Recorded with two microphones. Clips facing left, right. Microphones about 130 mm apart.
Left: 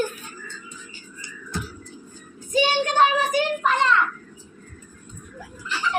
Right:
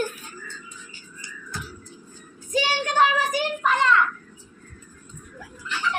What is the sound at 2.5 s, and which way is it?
Speech, 20° left (ahead or behind).